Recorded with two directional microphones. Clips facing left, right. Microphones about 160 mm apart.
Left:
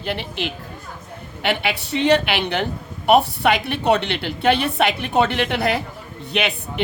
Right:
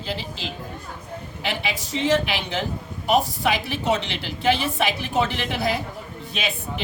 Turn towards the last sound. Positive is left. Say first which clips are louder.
# left 5 dB
turn(degrees=65)  # may be behind; listen again after turning